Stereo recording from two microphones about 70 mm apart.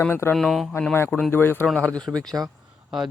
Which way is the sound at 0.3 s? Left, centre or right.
Centre.